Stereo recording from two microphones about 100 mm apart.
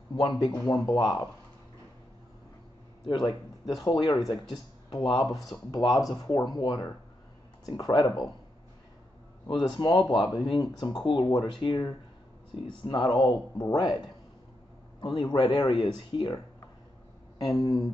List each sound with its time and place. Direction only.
0.1 s speech: 45° left (ahead or behind)
3.1 s speech: 50° left (ahead or behind)
9.5 s speech: 50° left (ahead or behind)
12.8 s speech: 45° left (ahead or behind)
15.0 s a man's voice: 65° left (ahead or behind)
15.2 s speech: 55° left (ahead or behind)
17.6 s speech: 40° left (ahead or behind)